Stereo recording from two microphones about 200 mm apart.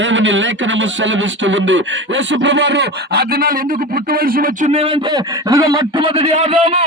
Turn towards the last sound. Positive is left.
turn(degrees=-30)  # may be behind; listen again after turning